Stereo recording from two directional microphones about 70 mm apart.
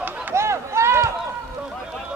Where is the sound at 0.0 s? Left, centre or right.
Right.